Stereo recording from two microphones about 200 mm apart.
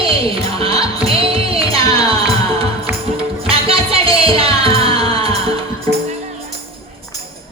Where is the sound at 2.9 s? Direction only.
10° right (ahead or behind).